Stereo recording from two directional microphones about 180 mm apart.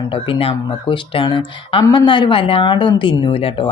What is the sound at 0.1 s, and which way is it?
Speech, 30° left (ahead or behind).